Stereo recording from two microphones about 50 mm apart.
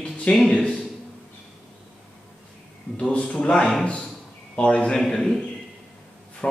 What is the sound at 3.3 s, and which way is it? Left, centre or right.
A man's voice, centre.